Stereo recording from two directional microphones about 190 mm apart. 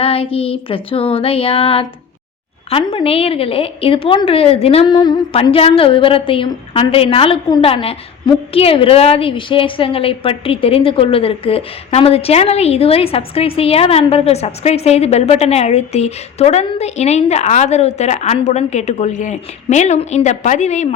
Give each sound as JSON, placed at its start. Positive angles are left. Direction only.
{"t": 0.0, "sound": "a woman's voice", "side_deg": 30}